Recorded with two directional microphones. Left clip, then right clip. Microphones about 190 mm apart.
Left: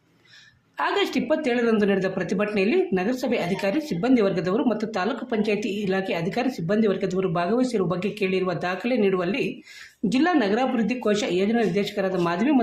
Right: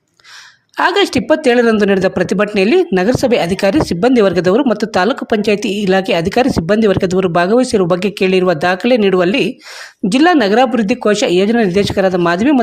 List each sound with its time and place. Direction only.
0.8 s speech: 45° right (ahead or behind)